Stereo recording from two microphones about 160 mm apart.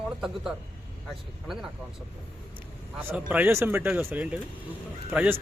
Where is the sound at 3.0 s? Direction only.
15° right (ahead or behind).